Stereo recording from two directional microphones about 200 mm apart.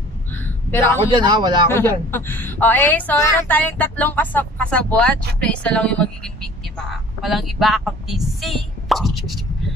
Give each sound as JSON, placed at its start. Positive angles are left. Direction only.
{"t": 0.3, "sound": "a sound", "side_deg": 10}
{"t": 1.0, "sound": "speech", "side_deg": -20}
{"t": 1.7, "sound": "a woman's voice", "side_deg": 10}